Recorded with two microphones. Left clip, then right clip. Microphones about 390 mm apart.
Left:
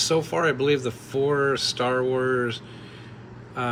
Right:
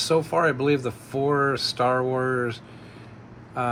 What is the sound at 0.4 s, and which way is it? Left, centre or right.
Speech, centre.